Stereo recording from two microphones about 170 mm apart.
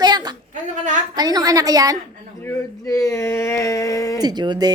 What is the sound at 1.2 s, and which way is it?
Speech, 25° right (ahead or behind).